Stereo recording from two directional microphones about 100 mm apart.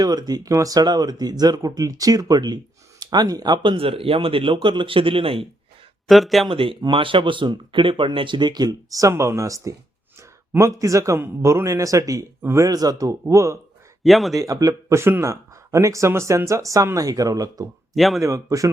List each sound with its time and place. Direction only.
0.0 s speech: 40° right (ahead or behind); by 5.5 s 65° right (ahead or behind)
6.1 s speech: centre (ahead or behind)
6.5 s speech: 60° right (ahead or behind); by 13.6 s 30° right (ahead or behind)
14.0 s speech: centre (ahead or behind)
14.3 s speech: 35° right (ahead or behind)
17.9 s speech: centre (ahead or behind)
18.2 s speech: 30° right (ahead or behind)